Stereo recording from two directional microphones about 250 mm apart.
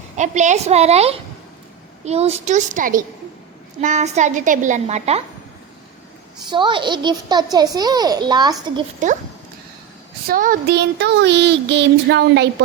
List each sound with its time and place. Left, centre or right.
0.2 s a woman's voice: right
6.4 s a child's voice: centre
9.0 s a woman's voice: right
10.2 s a sound: right